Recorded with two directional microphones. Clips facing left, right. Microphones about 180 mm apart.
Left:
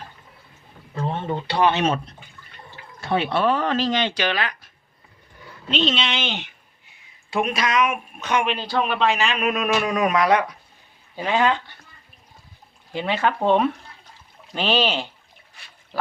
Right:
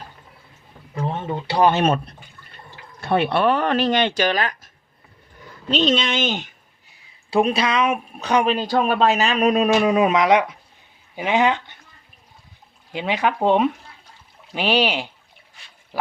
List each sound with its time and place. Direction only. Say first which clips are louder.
0.9 s a sound: even; 15° right (ahead or behind)
1.5 s speech: right 3 dB; 45° right (ahead or behind)
5.7 s speech: right 4 dB; 45° right (ahead or behind)
7.3 s speech: right 4 dB; 30° right (ahead or behind)
12.9 s speech: right 1 dB; 15° right (ahead or behind)